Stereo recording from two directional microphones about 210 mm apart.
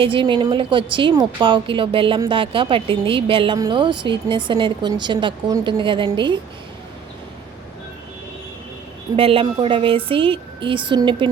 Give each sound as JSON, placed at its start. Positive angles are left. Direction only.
{"t": 0.0, "sound": "a woman's voice", "side_deg": -25}
{"t": 9.1, "sound": "a woman's voice", "side_deg": -25}